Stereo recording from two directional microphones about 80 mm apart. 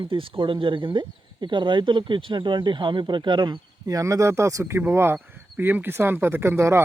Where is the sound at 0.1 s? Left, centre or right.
Right.